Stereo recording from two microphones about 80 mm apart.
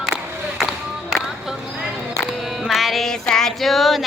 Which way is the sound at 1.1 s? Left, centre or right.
Centre.